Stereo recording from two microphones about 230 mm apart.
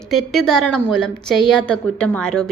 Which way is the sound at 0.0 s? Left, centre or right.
Centre.